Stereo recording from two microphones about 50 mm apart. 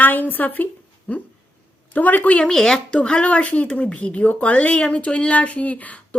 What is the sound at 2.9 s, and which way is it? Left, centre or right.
Speech, left.